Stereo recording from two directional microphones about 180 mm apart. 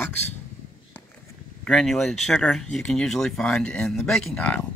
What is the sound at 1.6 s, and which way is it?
Speech, 5° left (ahead or behind).